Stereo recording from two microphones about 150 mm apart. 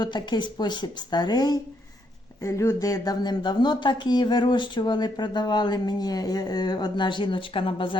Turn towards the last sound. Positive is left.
turn(degrees=35)  # may be behind; listen again after turning